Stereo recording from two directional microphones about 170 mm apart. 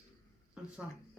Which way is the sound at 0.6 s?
5° right (ahead or behind).